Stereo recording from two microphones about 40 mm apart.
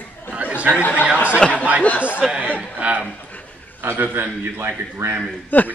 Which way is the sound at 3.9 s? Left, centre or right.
Right.